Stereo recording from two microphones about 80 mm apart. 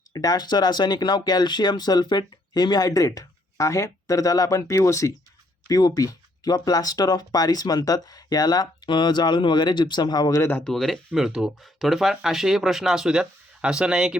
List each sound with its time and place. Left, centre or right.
0.1 s speech: left
10.6 s speech: centre